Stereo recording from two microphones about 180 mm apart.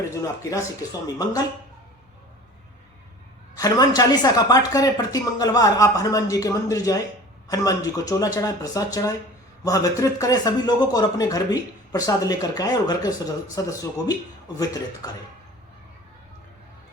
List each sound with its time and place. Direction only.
0.1 s speech: 20° left (ahead or behind)
3.5 s speech: 20° left (ahead or behind)